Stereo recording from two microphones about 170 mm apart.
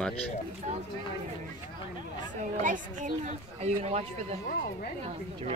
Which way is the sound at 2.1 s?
50° right (ahead or behind).